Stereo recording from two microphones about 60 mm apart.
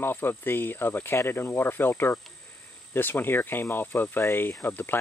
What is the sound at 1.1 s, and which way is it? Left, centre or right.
Speech, left.